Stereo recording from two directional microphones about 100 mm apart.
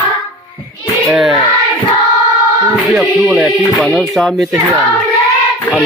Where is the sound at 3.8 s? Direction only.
Centre (ahead or behind).